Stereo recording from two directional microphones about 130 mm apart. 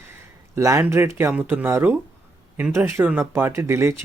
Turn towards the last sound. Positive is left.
turn(degrees=-20)  # may be behind; listen again after turning